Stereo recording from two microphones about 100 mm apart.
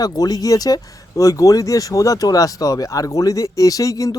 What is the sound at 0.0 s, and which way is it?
Speech, 40° left (ahead or behind).